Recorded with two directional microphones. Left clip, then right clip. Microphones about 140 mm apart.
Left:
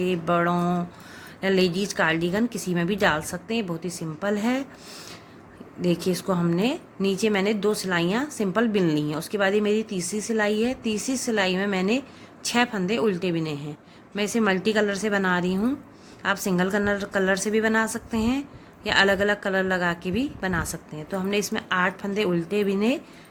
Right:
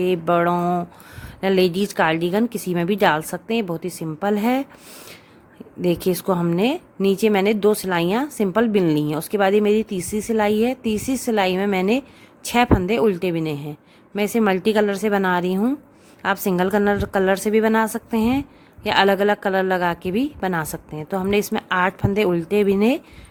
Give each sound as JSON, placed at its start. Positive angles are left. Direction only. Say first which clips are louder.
{"t": 0.0, "sound": "a woman's voice", "louder": "right 5 dB", "side_deg": -90}
{"t": 5.8, "sound": "a woman's voice", "louder": "right 5 dB", "side_deg": -90}